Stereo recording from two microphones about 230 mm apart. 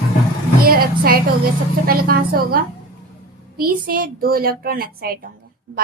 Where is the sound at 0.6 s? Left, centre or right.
Right.